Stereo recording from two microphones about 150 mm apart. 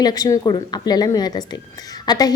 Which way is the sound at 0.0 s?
25° left (ahead or behind).